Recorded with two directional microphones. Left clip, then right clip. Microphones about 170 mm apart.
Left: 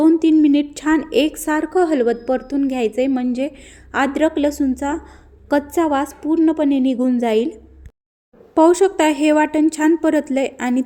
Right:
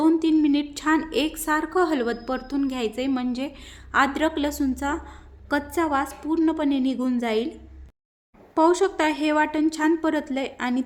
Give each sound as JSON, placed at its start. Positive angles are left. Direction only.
{"t": 0.0, "sound": "a sound", "side_deg": 20}
{"t": 1.1, "sound": "a woman's voice", "side_deg": 20}
{"t": 8.5, "sound": "a woman's voice", "side_deg": 20}